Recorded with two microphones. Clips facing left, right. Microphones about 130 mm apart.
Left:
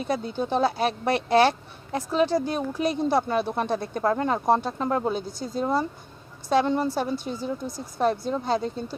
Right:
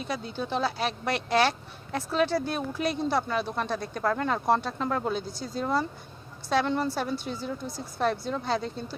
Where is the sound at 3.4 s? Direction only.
55° left (ahead or behind).